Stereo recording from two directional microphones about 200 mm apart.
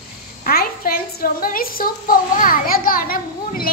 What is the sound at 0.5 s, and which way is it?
A woman's voice, 50° left (ahead or behind).